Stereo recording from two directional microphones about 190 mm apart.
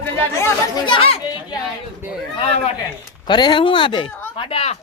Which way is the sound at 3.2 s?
25° left (ahead or behind).